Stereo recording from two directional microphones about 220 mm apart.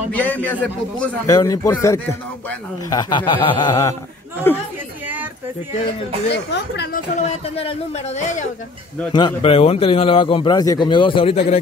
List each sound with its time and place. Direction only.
0.1 s a man's voice: 5° left (ahead or behind)
6.3 s speech: 50° left (ahead or behind)
7.2 s a man's voice: 25° left (ahead or behind)